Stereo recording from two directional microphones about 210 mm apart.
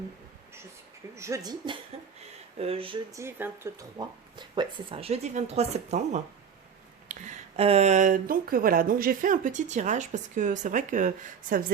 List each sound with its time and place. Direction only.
1.1 s speech: 15° right (ahead or behind); by 11.7 s 40° right (ahead or behind)